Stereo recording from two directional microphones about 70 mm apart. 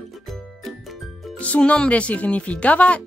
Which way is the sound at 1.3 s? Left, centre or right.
Centre.